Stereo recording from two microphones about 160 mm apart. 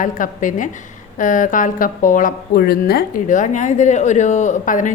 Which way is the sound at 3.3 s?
50° left (ahead or behind).